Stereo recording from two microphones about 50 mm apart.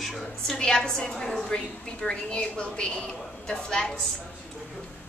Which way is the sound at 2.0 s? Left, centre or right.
Left.